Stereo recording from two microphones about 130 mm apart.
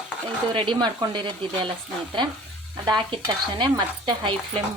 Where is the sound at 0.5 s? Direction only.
40° right (ahead or behind).